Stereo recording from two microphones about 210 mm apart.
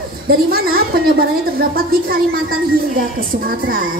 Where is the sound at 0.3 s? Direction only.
45° right (ahead or behind).